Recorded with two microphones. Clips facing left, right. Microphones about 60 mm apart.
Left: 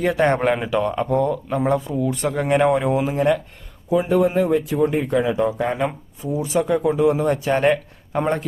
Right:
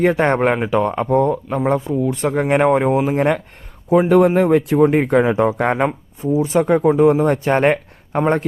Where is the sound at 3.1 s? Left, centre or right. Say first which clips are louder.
Right 2 dB; right.